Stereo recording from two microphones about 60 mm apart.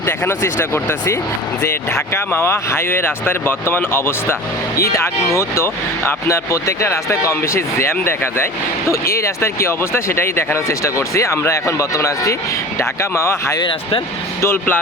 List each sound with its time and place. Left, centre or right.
0.0 s speech: left
4.8 s speech: left
8.9 s speech: left
12.8 s speech: left
14.4 s speech: left